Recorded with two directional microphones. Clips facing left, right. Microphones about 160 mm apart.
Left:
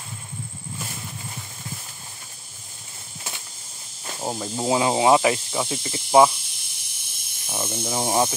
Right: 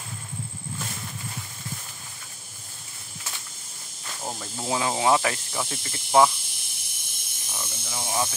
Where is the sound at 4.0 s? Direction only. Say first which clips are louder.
Left 6 dB; 25° left (ahead or behind).